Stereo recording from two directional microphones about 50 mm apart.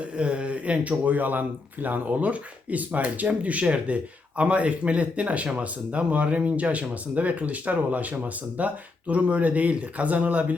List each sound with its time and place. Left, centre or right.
0.0 s speech: right